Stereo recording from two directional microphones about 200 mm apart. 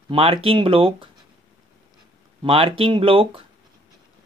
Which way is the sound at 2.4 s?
25° right (ahead or behind).